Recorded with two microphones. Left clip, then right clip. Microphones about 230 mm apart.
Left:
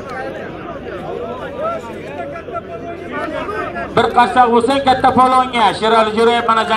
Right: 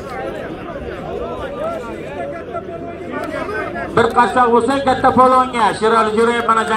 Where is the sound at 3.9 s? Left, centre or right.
Left.